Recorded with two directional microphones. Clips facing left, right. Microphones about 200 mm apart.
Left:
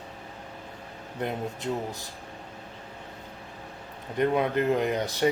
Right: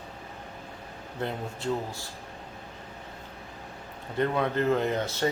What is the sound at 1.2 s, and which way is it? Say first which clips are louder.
Speech: left 1 dB; 20° left (ahead or behind).